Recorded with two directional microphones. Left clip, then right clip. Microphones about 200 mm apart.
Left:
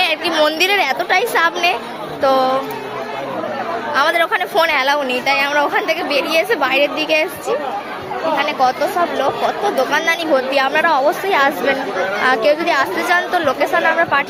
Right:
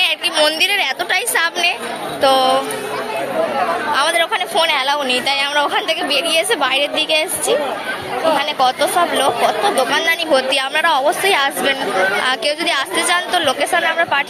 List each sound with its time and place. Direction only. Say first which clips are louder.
0.0 s a woman's voice: even; 15° left (ahead or behind)
3.9 s a woman's voice: left 3 dB; 20° left (ahead or behind)
5.2 s a woman's voice: left 1 dB; 10° left (ahead or behind)
8.4 s a woman's voice: even; 10° left (ahead or behind)
10.3 s a woman's voice: left 2 dB; centre (ahead or behind)